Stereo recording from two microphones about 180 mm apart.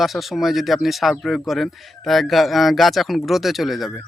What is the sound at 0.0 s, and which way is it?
Speech, centre (ahead or behind).